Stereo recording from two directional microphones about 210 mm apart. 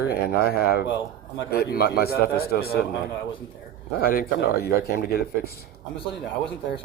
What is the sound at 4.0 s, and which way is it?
Speech, 45° left (ahead or behind).